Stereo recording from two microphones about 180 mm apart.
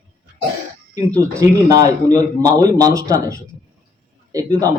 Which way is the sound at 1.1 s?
15° right (ahead or behind).